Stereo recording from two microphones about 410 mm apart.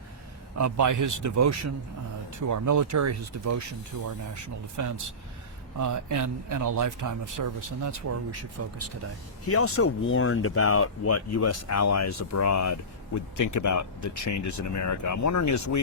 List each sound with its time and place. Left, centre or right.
0.6 s speech: right
9.5 s speech: left